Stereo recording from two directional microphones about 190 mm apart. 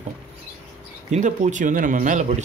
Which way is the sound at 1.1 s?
40° right (ahead or behind).